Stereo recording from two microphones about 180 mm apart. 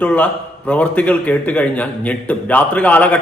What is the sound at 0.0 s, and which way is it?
A man's voice, 5° left (ahead or behind).